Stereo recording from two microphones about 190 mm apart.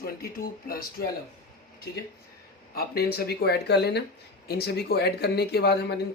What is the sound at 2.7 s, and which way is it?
Speech, 55° left (ahead or behind).